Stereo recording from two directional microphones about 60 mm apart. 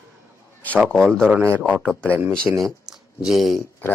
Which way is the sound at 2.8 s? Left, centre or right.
Centre.